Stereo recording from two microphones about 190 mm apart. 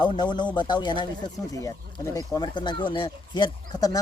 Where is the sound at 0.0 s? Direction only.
25° left (ahead or behind).